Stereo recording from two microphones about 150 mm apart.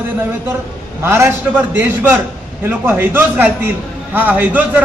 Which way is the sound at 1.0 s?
15° right (ahead or behind).